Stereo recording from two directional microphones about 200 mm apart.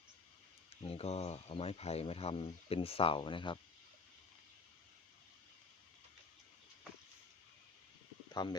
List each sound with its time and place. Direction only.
0.9 s speech: 30° left (ahead or behind)
8.3 s stomach rumble: 20° left (ahead or behind)